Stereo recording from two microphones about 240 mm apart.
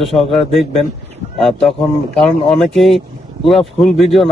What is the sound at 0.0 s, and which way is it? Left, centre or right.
Speech, centre.